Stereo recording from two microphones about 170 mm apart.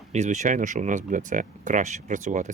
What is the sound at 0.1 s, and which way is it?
Speech, 45° right (ahead or behind).